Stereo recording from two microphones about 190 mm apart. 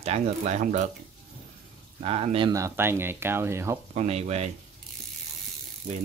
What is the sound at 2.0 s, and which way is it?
Speech, 30° right (ahead or behind).